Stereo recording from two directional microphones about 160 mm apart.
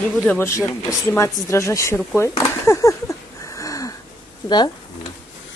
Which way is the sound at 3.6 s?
20° left (ahead or behind).